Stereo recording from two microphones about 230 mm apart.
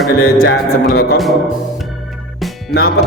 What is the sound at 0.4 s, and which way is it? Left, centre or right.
Music, left.